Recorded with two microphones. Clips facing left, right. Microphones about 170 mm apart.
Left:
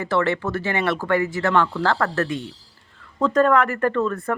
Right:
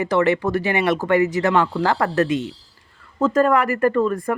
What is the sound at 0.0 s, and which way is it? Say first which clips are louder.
A woman's voice: right 4 dB; 15° right (ahead or behind).